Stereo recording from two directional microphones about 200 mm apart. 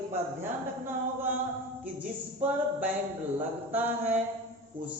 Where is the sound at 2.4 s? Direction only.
10° right (ahead or behind).